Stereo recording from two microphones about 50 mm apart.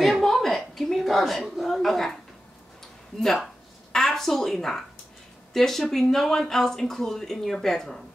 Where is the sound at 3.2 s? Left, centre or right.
Centre.